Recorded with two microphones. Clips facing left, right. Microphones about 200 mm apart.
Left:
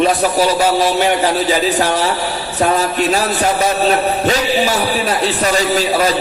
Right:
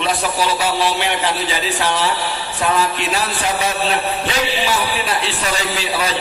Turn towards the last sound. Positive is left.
turn(degrees=45)  # may be behind; listen again after turning